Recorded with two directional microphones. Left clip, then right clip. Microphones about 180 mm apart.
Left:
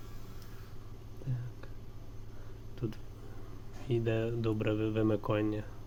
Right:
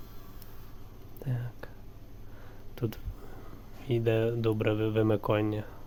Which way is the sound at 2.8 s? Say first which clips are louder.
Right 5 dB; 55° right (ahead or behind).